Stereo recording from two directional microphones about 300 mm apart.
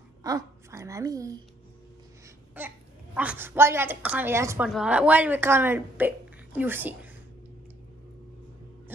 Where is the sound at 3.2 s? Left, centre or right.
Centre.